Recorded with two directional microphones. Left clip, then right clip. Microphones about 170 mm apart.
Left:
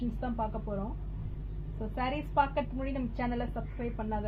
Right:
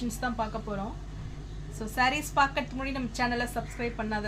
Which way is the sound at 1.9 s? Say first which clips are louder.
Right 4 dB; 25° left (ahead or behind).